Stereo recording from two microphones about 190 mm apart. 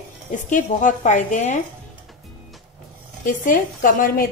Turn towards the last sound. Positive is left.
turn(degrees=50)  # may be behind; listen again after turning